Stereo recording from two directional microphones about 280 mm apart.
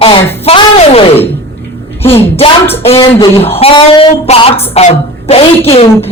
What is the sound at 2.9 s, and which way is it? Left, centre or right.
Speech, centre.